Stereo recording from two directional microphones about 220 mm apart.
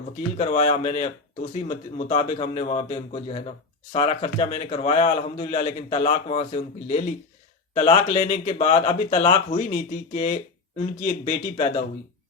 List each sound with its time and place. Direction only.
0.3 s a man's voice: 30° left (ahead or behind)